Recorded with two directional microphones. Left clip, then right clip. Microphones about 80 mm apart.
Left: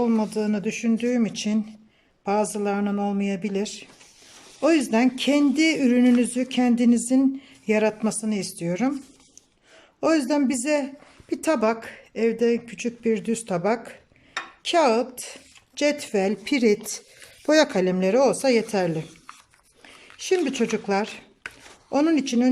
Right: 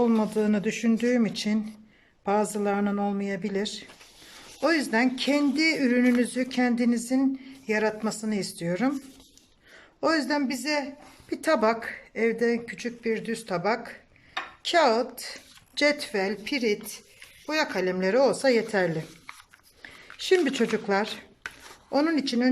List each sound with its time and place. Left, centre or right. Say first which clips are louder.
0.0 s speech: even; centre
4.6 s speech: left 3 dB; left; by 9.0 s centre
10.0 s speech: left 4 dB; left
11.3 s speech: left 1 dB; centre
15.7 s speech: left 1 dB; centre
16.0 s a woman's voice: left 4 dB; left
17.7 s speech: left 3 dB; left
20.2 s speech: even; centre
21.9 s speech: left 3 dB; left